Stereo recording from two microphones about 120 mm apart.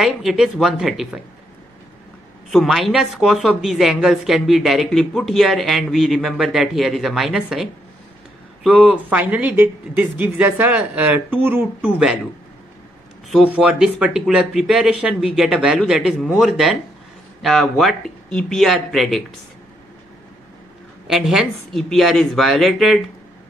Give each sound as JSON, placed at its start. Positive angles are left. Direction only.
{"t": 0.0, "sound": "a woman's voice", "side_deg": 0}
{"t": 2.5, "sound": "a woman's voice", "side_deg": 0}
{"t": 13.3, "sound": "a woman's voice", "side_deg": -5}
{"t": 21.1, "sound": "a woman's voice", "side_deg": 0}